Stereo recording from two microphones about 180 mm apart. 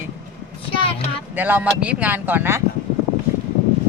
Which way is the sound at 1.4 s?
10° right (ahead or behind).